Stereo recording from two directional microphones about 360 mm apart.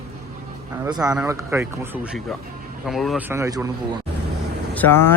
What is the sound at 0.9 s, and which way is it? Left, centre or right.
Speech, centre.